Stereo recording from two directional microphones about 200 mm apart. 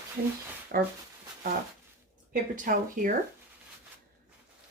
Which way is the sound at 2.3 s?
40° right (ahead or behind).